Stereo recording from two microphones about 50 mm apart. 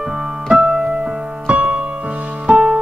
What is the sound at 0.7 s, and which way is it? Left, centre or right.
Music, centre.